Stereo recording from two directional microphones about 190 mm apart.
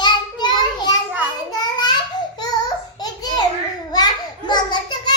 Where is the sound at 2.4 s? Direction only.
20° left (ahead or behind).